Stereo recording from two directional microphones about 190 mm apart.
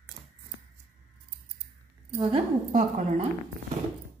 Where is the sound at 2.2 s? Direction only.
35° right (ahead or behind).